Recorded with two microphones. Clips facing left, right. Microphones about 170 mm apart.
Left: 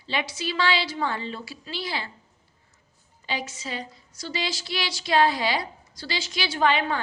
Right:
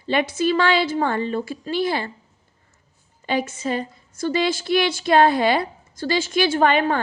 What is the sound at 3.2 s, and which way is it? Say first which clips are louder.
A woman's voice: right 9 dB; 50° right (ahead or behind).